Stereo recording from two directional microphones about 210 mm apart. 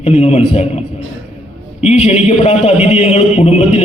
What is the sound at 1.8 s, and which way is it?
A man's voice, 30° left (ahead or behind).